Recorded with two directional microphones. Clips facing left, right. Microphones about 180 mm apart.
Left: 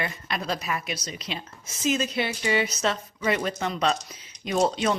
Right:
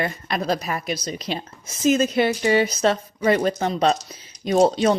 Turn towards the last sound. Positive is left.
turn(degrees=-35)  # may be behind; listen again after turning